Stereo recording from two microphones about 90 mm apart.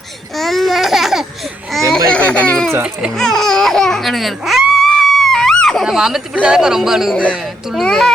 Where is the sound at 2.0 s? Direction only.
10° left (ahead or behind).